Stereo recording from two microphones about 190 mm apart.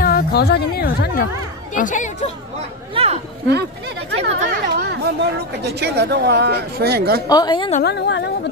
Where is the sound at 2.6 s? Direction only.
30° right (ahead or behind).